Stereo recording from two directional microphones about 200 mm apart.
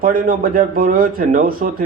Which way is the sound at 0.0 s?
45° right (ahead or behind).